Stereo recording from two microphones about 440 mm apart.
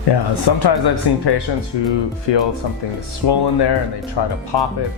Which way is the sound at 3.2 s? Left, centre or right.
Left.